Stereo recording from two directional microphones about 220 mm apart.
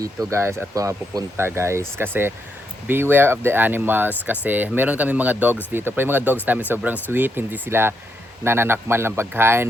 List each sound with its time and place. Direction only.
0.3 s speech: 10° right (ahead or behind)